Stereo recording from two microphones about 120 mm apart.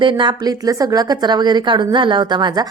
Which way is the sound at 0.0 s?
40° right (ahead or behind).